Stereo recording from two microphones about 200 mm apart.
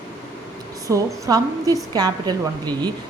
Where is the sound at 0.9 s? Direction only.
15° right (ahead or behind).